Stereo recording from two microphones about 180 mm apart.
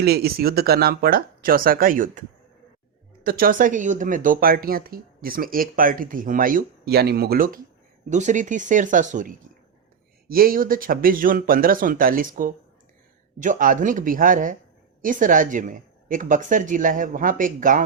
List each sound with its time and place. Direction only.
0.0 s speech: 60° right (ahead or behind)
3.2 s speech: 55° right (ahead or behind)